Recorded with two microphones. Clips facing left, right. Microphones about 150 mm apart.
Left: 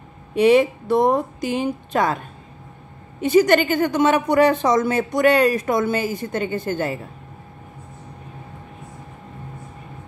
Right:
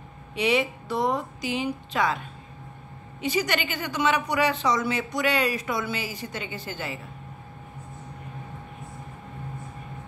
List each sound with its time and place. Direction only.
0.3 s speech: 45° left (ahead or behind)